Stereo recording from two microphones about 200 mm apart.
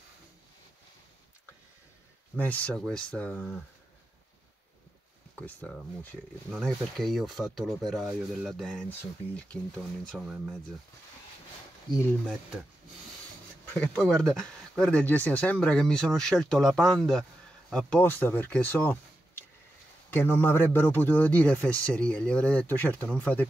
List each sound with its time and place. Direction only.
2.3 s speech: 10° left (ahead or behind)
5.4 s speech: 5° left (ahead or behind)
10.1 s speech: 5° right (ahead or behind)
13.7 s speech: 5° left (ahead or behind)
20.1 s speech: 10° left (ahead or behind)